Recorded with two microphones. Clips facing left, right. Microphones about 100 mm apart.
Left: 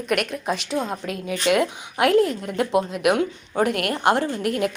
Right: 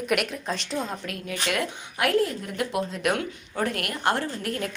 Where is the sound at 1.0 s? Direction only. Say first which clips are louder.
Left 7 dB; 20° left (ahead or behind).